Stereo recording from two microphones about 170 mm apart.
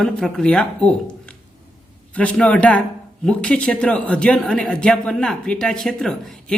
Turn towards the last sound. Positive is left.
turn(degrees=5)  # may be behind; listen again after turning